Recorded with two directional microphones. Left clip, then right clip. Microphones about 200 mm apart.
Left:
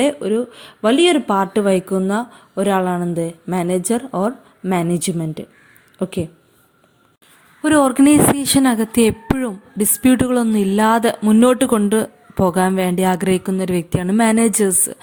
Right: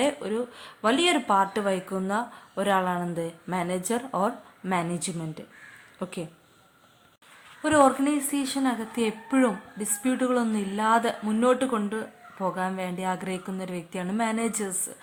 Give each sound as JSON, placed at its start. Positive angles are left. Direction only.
{"t": 0.0, "sound": "speech", "side_deg": 30}
{"t": 7.6, "sound": "a woman's voice", "side_deg": 35}